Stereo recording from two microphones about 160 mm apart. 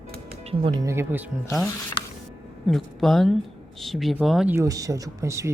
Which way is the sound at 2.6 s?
Centre (ahead or behind).